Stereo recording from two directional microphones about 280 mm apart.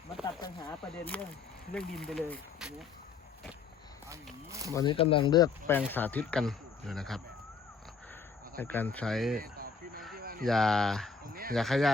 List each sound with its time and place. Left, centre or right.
0.3 s a sound: centre
1.7 s speech: centre
4.7 s speech: centre
8.5 s speech: centre
9.4 s a sound: right
10.4 s speech: centre